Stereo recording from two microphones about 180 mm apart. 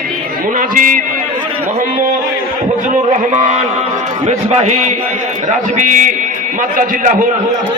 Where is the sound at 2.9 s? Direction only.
45° right (ahead or behind).